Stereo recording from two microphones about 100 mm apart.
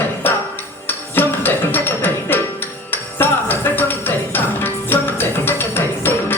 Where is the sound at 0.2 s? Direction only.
20° left (ahead or behind).